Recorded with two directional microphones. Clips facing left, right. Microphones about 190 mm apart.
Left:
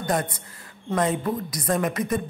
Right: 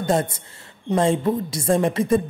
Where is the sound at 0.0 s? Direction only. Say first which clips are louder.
Right 4 dB; 25° right (ahead or behind).